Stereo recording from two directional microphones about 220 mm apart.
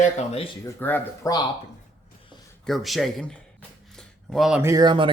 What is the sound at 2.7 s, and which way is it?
Speech, centre (ahead or behind).